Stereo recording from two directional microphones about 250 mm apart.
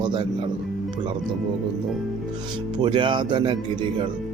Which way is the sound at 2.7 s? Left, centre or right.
Centre.